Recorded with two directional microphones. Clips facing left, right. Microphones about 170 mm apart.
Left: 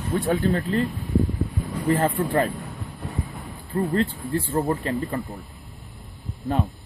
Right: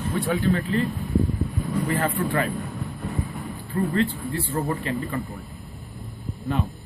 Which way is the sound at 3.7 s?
35° left (ahead or behind).